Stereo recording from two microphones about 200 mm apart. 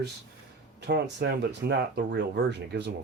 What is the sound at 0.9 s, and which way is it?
Speech, 60° right (ahead or behind).